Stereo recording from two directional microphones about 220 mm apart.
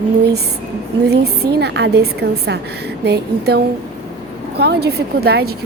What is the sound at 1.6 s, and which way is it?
Speech, 50° right (ahead or behind).